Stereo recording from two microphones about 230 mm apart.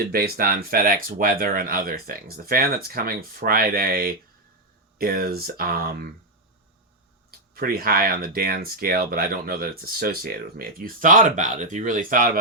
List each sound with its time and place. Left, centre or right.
0.0 s speech: right
7.3 s speech: right